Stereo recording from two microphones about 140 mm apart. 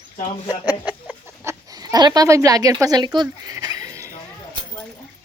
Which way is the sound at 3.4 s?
30° right (ahead or behind).